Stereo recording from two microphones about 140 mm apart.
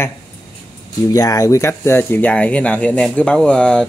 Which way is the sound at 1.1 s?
25° left (ahead or behind).